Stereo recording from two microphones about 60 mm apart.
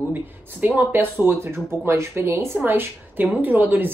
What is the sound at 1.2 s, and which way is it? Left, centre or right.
A woman's voice, right.